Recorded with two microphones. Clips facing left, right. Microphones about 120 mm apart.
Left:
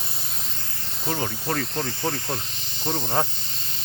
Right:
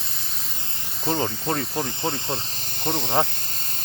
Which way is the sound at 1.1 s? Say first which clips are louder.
Right 3 dB; 20° right (ahead or behind).